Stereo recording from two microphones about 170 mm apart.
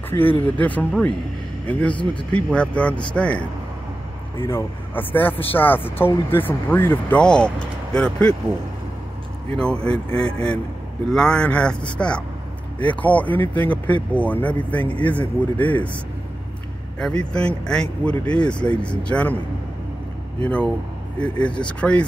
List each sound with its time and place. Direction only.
0.1 s speech: 10° left (ahead or behind)
4.5 s speech: 15° left (ahead or behind)
9.6 s speech: 5° left (ahead or behind)
17.0 s speech: 5° left (ahead or behind)
20.4 s speech: 5° left (ahead or behind)